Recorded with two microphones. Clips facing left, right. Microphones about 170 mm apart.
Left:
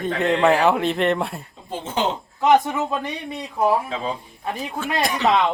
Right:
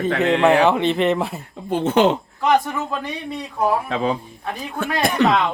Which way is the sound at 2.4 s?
20° left (ahead or behind).